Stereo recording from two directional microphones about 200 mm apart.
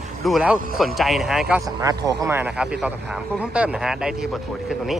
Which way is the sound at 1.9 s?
15° right (ahead or behind).